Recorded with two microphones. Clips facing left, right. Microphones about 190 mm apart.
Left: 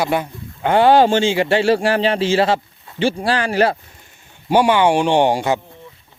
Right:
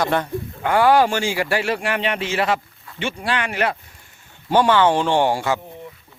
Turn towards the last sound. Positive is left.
turn(degrees=20)  # may be behind; listen again after turning